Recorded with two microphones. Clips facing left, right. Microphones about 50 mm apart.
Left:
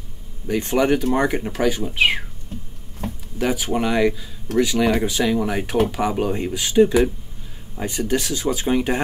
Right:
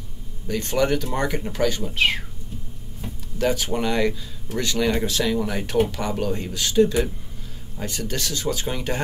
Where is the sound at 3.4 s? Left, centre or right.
Centre.